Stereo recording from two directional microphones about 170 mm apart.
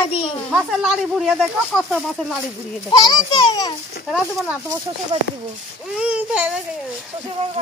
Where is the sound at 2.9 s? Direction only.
25° left (ahead or behind).